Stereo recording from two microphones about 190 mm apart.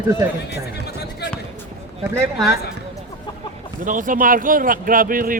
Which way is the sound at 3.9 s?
45° right (ahead or behind).